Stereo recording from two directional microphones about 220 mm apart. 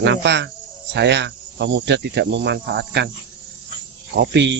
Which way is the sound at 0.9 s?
50° right (ahead or behind).